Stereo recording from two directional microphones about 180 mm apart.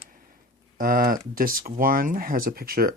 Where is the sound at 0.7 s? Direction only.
50° right (ahead or behind).